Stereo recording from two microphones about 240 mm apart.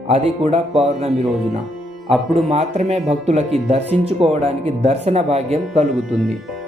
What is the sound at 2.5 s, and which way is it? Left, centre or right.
Speech, right.